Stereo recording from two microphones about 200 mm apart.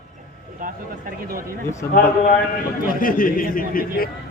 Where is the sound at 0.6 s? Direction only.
45° right (ahead or behind).